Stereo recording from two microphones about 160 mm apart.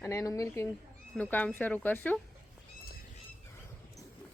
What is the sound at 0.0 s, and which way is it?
Speech, 20° left (ahead or behind).